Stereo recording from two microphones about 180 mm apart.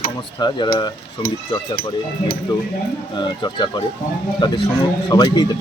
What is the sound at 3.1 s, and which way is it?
Speech, 25° left (ahead or behind).